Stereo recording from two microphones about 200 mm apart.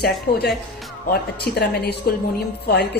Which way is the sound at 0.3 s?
45° left (ahead or behind).